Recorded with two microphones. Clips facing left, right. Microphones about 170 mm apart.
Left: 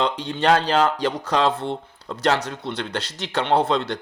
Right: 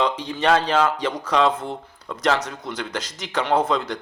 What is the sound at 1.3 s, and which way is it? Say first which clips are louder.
Speech: right 2 dB; 35° left (ahead or behind).